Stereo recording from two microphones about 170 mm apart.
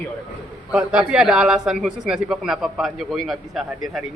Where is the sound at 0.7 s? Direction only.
5° right (ahead or behind).